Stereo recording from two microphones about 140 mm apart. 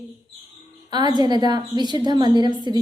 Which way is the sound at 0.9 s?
30° right (ahead or behind).